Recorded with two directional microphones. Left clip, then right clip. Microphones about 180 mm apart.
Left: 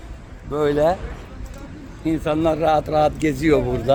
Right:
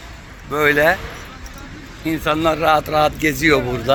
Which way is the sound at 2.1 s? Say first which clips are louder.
Right 2 dB; 20° left (ahead or behind).